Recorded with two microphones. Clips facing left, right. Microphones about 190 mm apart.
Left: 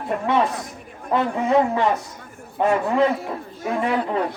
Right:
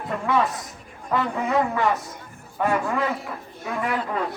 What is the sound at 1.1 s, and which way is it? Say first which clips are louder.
A man's voice: left 4 dB; 25° left (ahead or behind).